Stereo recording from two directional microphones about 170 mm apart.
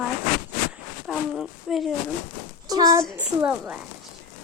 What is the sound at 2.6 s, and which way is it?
Speech, 20° right (ahead or behind).